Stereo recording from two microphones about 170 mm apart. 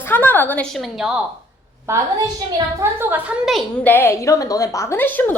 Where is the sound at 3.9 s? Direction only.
15° left (ahead or behind).